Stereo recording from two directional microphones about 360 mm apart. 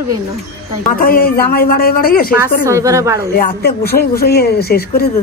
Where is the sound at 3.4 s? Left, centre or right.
Left.